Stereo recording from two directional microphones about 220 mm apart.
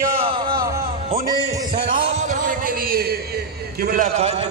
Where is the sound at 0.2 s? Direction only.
25° right (ahead or behind).